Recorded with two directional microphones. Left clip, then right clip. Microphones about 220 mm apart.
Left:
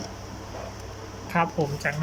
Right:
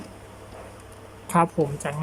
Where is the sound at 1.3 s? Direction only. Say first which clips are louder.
Right 3 dB; 15° right (ahead or behind).